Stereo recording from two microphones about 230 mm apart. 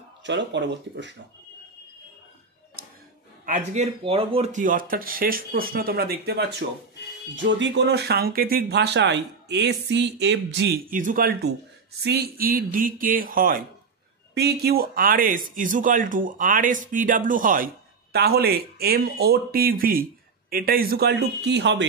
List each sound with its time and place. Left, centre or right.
0.2 s speech: right
3.4 s speech: right